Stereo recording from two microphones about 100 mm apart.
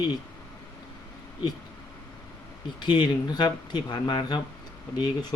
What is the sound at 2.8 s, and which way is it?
Speech, 50° left (ahead or behind).